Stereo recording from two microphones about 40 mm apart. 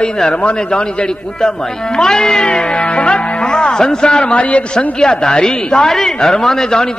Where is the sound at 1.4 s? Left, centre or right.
Centre.